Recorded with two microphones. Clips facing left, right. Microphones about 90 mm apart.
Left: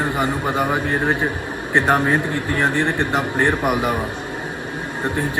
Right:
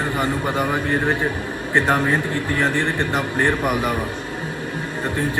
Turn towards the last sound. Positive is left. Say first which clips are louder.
# left 1 dB
turn(degrees=20)  # may be behind; listen again after turning